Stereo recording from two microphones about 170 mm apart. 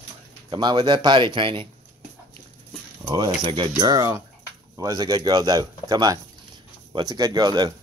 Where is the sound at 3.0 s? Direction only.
25° right (ahead or behind).